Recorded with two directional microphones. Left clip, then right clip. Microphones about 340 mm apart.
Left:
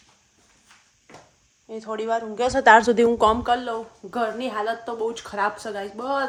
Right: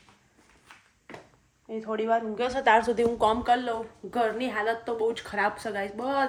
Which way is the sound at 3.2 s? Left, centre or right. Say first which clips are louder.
Left 4 dB; centre.